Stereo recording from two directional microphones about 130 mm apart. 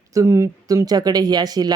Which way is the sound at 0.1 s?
25° right (ahead or behind).